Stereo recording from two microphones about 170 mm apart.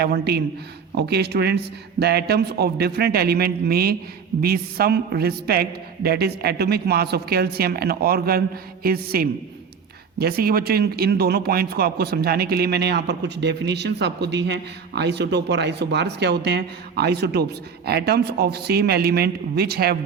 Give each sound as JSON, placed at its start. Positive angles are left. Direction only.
{"t": 0.0, "sound": "a woman's voice", "side_deg": -65}